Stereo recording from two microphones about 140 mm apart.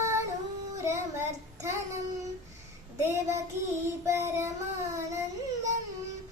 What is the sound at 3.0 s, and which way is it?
Child singing, 20° right (ahead or behind).